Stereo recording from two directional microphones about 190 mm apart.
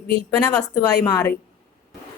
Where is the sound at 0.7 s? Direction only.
20° left (ahead or behind).